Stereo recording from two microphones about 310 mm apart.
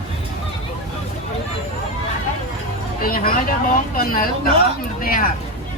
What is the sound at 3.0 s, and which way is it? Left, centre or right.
Speech, left.